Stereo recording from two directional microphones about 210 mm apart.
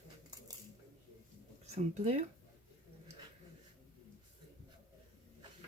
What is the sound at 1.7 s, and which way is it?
Speech, 30° right (ahead or behind).